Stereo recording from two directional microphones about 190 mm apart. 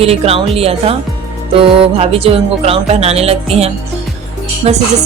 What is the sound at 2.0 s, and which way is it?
A woman's voice, 30° right (ahead or behind).